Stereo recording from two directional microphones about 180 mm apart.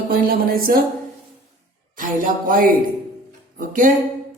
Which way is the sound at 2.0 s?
50° right (ahead or behind).